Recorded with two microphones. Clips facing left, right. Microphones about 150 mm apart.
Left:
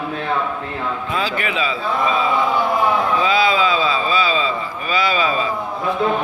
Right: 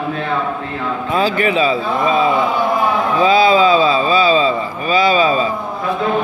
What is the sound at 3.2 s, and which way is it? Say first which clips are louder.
Speech: right 9 dB; 30° right (ahead or behind).